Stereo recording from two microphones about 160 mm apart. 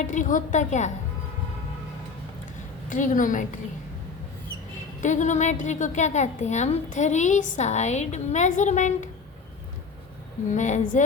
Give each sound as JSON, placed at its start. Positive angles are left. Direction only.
{"t": 0.0, "sound": "a woman's voice", "side_deg": 50}
{"t": 2.9, "sound": "a woman's voice", "side_deg": 55}
{"t": 4.9, "sound": "a woman's voice", "side_deg": 50}
{"t": 10.5, "sound": "a woman's voice", "side_deg": 50}